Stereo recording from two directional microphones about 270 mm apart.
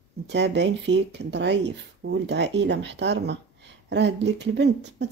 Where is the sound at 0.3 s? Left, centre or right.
Right.